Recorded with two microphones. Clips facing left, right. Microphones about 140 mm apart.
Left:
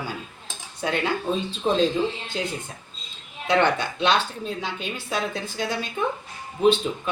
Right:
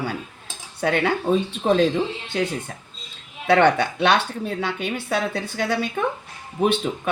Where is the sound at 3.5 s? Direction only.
65° right (ahead or behind).